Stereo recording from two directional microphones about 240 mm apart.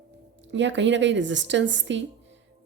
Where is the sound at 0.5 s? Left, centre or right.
Right.